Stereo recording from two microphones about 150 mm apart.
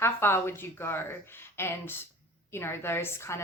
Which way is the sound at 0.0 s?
15° left (ahead or behind).